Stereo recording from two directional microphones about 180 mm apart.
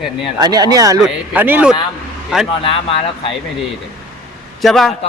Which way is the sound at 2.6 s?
30° left (ahead or behind).